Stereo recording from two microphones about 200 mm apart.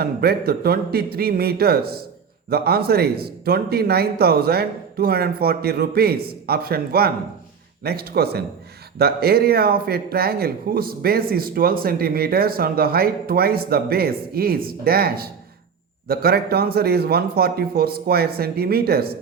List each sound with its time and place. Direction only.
0.0 s a man's voice: 50° right (ahead or behind)